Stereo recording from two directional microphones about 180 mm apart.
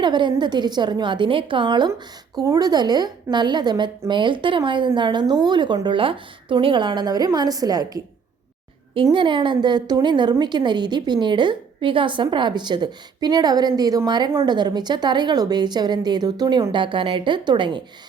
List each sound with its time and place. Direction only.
0.0 s a woman's voice: 25° right (ahead or behind)
9.0 s a woman's voice: 25° right (ahead or behind)